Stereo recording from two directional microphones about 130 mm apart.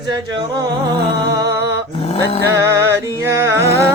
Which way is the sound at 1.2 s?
25° right (ahead or behind).